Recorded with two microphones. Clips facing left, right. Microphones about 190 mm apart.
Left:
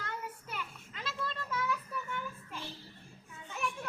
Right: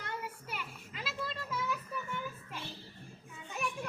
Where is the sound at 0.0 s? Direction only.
10° right (ahead or behind).